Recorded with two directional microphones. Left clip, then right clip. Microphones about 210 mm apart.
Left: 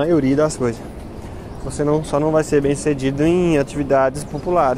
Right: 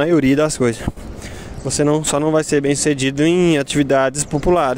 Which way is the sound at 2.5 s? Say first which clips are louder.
Even; 70° right (ahead or behind).